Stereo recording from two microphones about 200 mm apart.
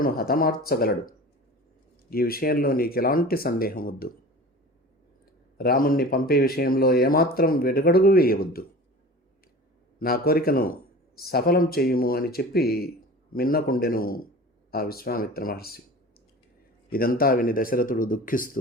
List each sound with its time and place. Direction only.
0.0 s speech: 45° left (ahead or behind)
5.5 s speech: 50° left (ahead or behind)
10.0 s speech: 50° left (ahead or behind)
16.9 s speech: 45° left (ahead or behind)